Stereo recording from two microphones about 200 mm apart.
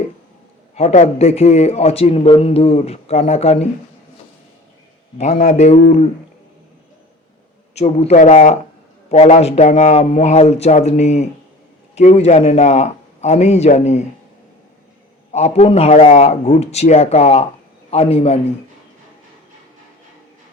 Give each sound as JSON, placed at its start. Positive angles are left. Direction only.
{"t": 0.8, "sound": "a man's voice", "side_deg": 30}
{"t": 5.1, "sound": "a man's voice", "side_deg": 35}
{"t": 7.8, "sound": "a man's voice", "side_deg": 30}
{"t": 15.3, "sound": "a man's voice", "side_deg": 35}